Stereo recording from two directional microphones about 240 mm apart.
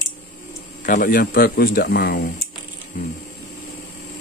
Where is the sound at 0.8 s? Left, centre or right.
Left.